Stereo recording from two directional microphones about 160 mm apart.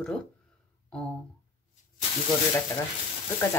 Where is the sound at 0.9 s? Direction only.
5° left (ahead or behind).